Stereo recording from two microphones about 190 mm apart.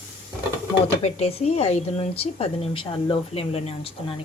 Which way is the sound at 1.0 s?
35° left (ahead or behind).